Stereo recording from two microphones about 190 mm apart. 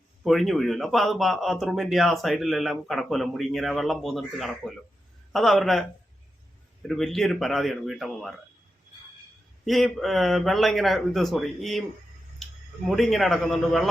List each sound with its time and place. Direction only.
0.3 s speech: centre (ahead or behind)
6.8 s speech: centre (ahead or behind)
9.6 s speech: centre (ahead or behind)
12.9 s speech: centre (ahead or behind)